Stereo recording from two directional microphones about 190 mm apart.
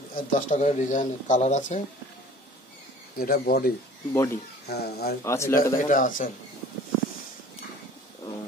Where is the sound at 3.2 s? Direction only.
50° left (ahead or behind).